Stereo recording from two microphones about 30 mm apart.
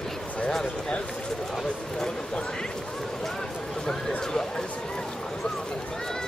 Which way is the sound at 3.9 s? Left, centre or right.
Left.